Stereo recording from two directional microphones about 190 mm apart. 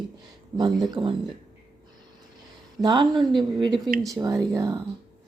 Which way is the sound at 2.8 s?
25° right (ahead or behind).